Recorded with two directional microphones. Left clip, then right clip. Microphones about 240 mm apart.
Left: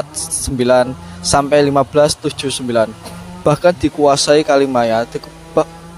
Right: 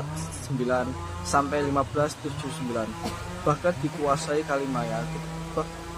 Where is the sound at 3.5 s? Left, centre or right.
Left.